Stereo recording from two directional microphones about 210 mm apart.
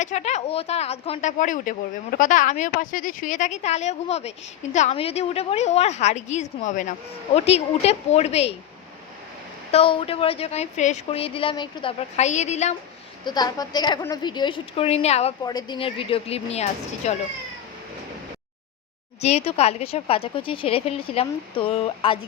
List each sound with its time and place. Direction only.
0.0 s a woman's voice: 35° left (ahead or behind)
9.7 s a woman's voice: 25° left (ahead or behind)
13.2 s a woman's voice: 20° left (ahead or behind)
15.4 s a woman's voice: 20° left (ahead or behind)
19.2 s a woman's voice: 30° left (ahead or behind)